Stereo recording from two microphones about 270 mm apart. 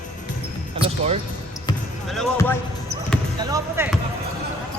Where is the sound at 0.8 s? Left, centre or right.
Right.